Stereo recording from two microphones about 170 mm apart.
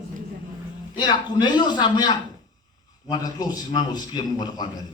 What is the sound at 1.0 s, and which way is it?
A man's voice, 25° left (ahead or behind).